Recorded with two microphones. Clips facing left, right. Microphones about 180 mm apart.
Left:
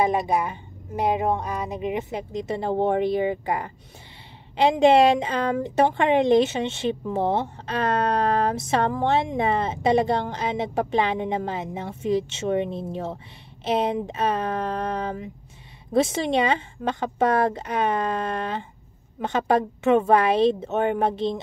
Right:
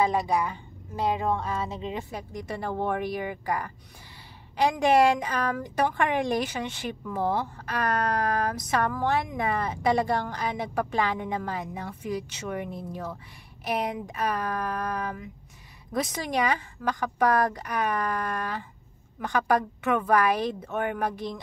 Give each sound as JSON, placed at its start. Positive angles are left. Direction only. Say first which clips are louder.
{"t": 0.0, "sound": "a woman's voice", "louder": "left 3 dB", "side_deg": 20}